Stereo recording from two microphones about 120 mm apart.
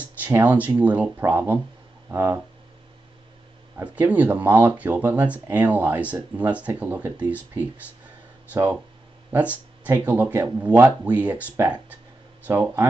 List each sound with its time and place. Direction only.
0.0 s speech: 15° right (ahead or behind)
3.7 s speech: 10° right (ahead or behind)